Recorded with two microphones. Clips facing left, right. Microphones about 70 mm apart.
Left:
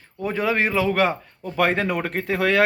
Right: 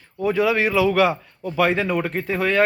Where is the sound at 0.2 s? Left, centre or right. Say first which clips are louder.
Right 3 dB; left.